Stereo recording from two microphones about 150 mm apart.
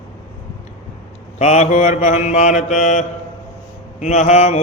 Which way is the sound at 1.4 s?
50° left (ahead or behind).